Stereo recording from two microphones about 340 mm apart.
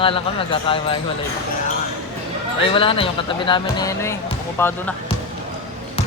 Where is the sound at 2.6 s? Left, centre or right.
Centre.